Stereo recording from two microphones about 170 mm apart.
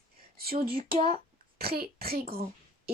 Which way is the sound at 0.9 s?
35° right (ahead or behind).